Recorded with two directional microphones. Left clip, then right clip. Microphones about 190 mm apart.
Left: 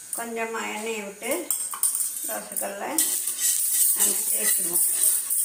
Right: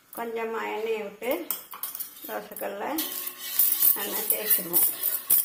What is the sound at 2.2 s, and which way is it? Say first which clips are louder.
Speech: right 2 dB; 55° right (ahead or behind).